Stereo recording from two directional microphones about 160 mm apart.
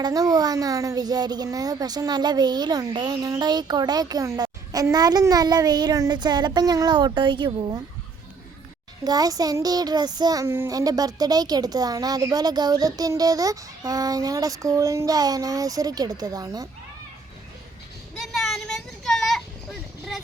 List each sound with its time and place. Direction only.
0.0 s a woman's voice: 25° right (ahead or behind)
9.0 s a woman's voice: 25° right (ahead or behind)
18.2 s a sound: centre (ahead or behind)